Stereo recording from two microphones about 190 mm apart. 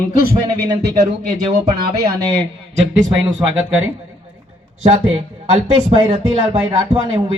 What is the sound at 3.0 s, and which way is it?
Speech, 80° right.